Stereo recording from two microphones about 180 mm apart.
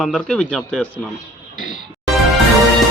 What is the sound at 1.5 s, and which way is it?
Music, 45° left (ahead or behind).